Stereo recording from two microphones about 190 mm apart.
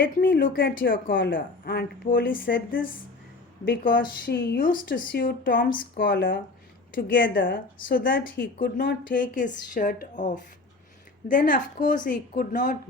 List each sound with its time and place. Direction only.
0.0 s speech: 50° left (ahead or behind)